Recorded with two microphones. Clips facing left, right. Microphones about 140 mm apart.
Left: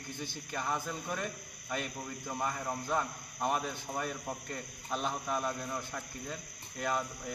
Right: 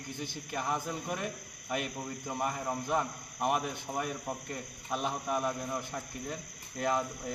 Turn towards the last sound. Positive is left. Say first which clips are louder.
# right 3 dB
turn(degrees=-25)  # may be behind; listen again after turning